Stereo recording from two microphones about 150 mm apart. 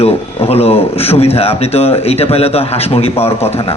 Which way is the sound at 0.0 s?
40° left (ahead or behind).